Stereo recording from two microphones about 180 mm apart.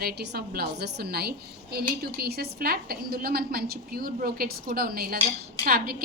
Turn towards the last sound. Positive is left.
turn(degrees=-55)  # may be behind; listen again after turning